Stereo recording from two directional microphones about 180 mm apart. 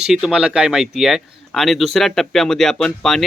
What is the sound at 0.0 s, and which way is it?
Speech, 5° right (ahead or behind).